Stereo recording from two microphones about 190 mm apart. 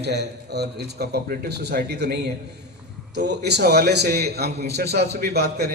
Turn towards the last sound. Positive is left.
turn(degrees=-60)  # may be behind; listen again after turning